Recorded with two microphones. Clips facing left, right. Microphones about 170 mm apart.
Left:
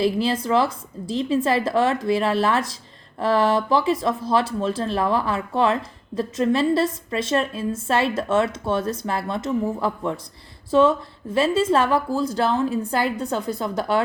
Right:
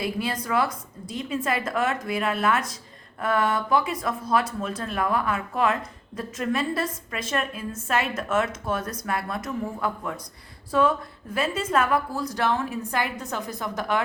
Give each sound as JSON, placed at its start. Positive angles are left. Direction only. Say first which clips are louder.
{"t": 0.0, "sound": "speech", "louder": "left 7 dB", "side_deg": 30}